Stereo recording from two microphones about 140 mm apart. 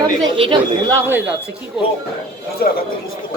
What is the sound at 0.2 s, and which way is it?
Speech, 35° right (ahead or behind).